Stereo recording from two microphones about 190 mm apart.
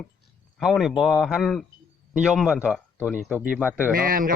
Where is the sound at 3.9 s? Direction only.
45° right (ahead or behind).